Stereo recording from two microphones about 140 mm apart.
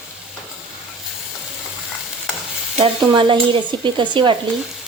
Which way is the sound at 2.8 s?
35° right (ahead or behind).